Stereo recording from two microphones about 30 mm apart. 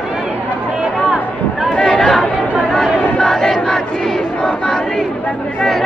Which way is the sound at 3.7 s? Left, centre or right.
Centre.